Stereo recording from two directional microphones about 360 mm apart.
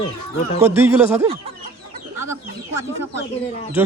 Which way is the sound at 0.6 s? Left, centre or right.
Centre.